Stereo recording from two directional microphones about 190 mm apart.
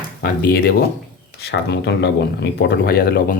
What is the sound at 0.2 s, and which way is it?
Speech, 50° left (ahead or behind).